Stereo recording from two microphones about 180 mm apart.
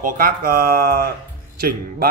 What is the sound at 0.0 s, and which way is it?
Speech, 55° right (ahead or behind).